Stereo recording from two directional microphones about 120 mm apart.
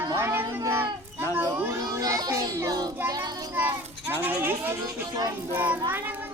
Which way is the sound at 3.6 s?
15° right (ahead or behind).